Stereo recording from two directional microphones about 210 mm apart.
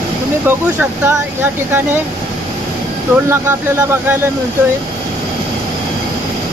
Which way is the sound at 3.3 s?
10° right (ahead or behind).